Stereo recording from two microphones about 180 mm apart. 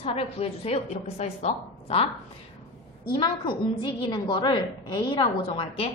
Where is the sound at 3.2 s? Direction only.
25° left (ahead or behind).